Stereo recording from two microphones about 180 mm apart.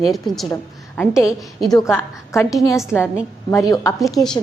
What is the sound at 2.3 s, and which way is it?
A woman's voice, 15° left (ahead or behind).